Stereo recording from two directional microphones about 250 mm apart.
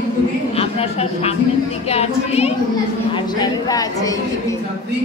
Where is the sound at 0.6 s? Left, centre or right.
Left.